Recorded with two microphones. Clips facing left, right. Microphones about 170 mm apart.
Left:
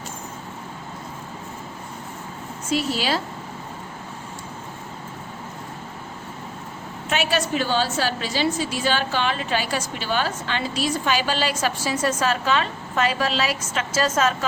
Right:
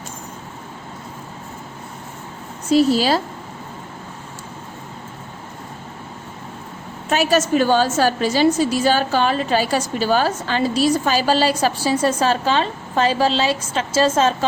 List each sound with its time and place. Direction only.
2.6 s a woman's voice: 35° right (ahead or behind)
7.1 s a woman's voice: 40° right (ahead or behind)